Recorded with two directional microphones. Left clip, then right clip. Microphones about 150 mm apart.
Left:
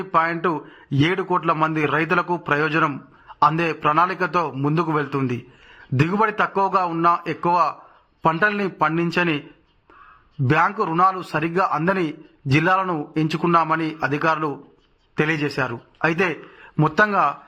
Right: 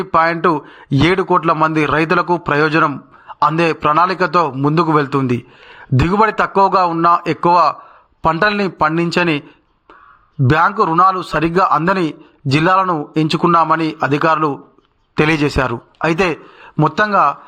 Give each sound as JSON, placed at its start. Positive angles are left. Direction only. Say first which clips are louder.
{"t": 0.0, "sound": "a man's voice", "louder": "right 7 dB", "side_deg": -30}
{"t": 10.4, "sound": "a man's voice", "louder": "right 6 dB", "side_deg": -30}